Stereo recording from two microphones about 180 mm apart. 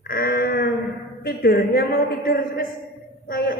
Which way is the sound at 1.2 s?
55° left (ahead or behind).